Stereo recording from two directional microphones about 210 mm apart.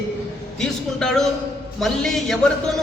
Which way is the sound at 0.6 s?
5° left (ahead or behind).